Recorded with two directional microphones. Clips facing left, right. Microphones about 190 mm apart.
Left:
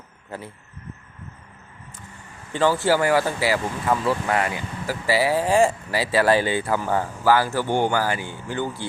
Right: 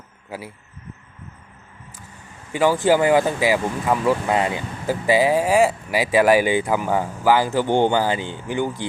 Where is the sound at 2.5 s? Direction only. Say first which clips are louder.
Right 3 dB; 15° right (ahead or behind).